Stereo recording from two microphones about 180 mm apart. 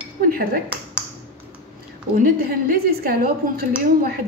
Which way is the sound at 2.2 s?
55° right (ahead or behind).